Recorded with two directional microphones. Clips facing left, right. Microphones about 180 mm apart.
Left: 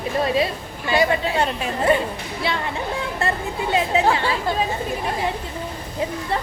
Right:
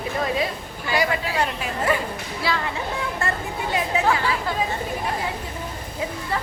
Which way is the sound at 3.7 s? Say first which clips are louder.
Left 3 dB; 25° left (ahead or behind).